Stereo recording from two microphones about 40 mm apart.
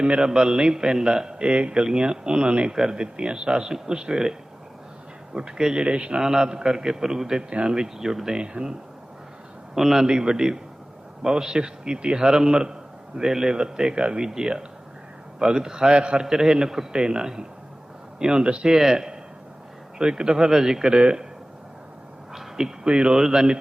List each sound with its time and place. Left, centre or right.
0.2 s a man's voice: centre
1.8 s a man's voice: right
2.7 s a man's voice: centre
5.8 s a man's voice: right
6.1 s a man's voice: centre
8.4 s a man's voice: right
9.7 s a man's voice: centre; by 16.2 s right
16.2 s a man's voice: centre
18.8 s a man's voice: centre
20.9 s a man's voice: right
22.3 s a sound: centre
22.9 s a man's voice: right